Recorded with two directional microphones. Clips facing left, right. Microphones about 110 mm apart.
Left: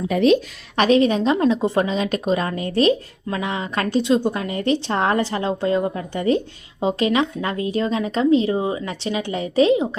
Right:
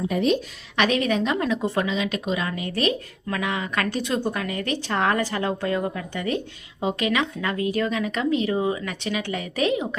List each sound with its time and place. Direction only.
0.1 s a woman's voice: 90° left
0.8 s a woman's voice: 30° left (ahead or behind)
1.9 s speech: 40° left (ahead or behind)